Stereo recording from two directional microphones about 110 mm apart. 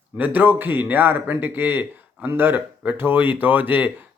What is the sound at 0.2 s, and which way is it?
Speech, 15° right (ahead or behind).